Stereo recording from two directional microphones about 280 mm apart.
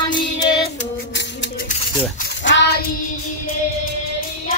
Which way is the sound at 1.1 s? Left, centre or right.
Left.